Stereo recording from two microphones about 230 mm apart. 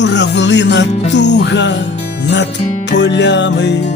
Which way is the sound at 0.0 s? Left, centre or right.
Left.